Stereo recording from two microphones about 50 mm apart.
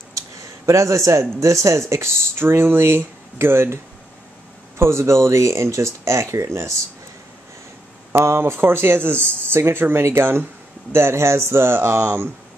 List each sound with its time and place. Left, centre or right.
0.1 s a sound: right
1.4 s speech: right
4.7 s speech: right
8.1 s speech: right